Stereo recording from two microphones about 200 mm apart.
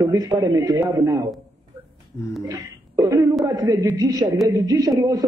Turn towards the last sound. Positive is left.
turn(degrees=-15)  # may be behind; listen again after turning